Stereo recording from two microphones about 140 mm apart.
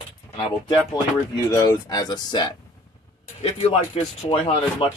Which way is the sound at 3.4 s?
45° left (ahead or behind).